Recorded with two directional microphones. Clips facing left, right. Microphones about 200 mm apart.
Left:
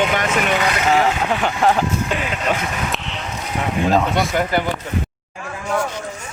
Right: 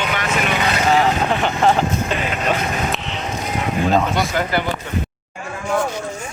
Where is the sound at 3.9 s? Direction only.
Centre (ahead or behind).